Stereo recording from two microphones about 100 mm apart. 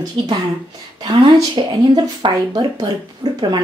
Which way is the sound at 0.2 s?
50° right (ahead or behind).